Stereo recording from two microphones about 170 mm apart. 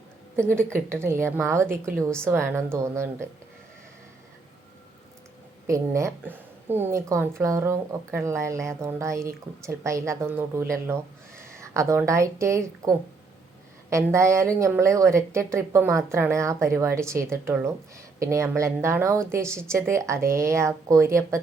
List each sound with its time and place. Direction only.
0.4 s speech: 15° right (ahead or behind)
5.6 s a woman's voice: 20° right (ahead or behind)
13.9 s speech: 15° right (ahead or behind)